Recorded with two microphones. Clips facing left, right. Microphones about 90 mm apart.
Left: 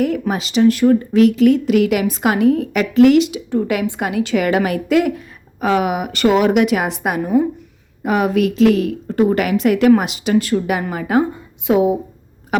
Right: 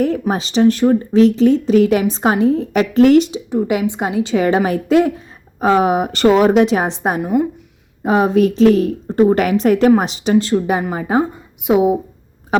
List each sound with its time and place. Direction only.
0.0 s a woman's voice: 35° right (ahead or behind)
3.5 s a woman's voice: 20° right (ahead or behind)
7.2 s speech: 10° right (ahead or behind)
8.0 s a woman's voice: 30° right (ahead or behind)